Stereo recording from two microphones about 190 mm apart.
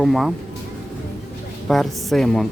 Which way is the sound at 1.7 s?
Centre (ahead or behind).